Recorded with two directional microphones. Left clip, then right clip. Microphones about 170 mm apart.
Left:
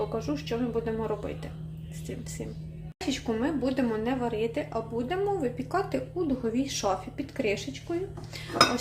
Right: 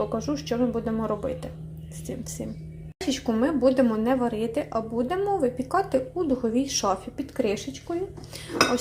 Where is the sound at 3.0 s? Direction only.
20° right (ahead or behind).